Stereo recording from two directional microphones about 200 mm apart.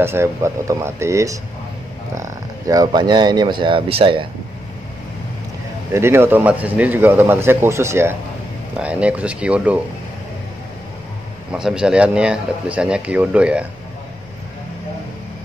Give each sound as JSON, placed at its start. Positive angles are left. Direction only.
{"t": 0.0, "sound": "speech", "side_deg": -10}
{"t": 5.9, "sound": "speech", "side_deg": -10}
{"t": 11.5, "sound": "speech", "side_deg": -5}